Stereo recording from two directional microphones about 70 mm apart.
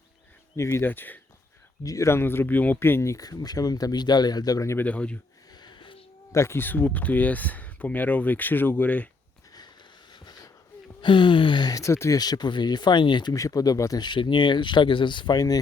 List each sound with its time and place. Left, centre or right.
0.5 s speech: left
0.9 s speech: left
1.8 s speech: left
2.0 s speech: left
3.2 s speech: left
4.8 s speech: centre
5.5 s sniff: left
6.3 s speech: left
10.1 s a sound: left
11.2 s speech: left
11.8 s speech: left
12.1 s speech: left
13.3 s speech: left
14.0 s speech: left